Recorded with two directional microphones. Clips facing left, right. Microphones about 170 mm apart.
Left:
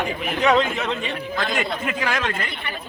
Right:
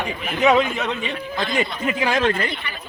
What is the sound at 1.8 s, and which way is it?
Speech, 25° right (ahead or behind).